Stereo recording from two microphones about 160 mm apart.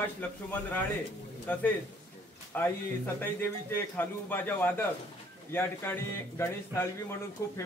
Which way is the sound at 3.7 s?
10° left (ahead or behind).